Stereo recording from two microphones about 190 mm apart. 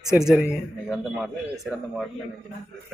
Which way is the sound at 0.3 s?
5° right (ahead or behind).